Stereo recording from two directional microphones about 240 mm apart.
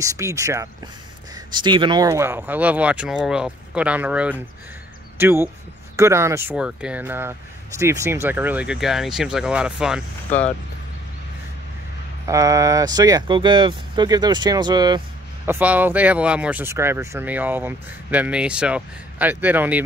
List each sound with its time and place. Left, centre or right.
0.0 s speech: centre
12.3 s speech: centre
15.4 s speech: centre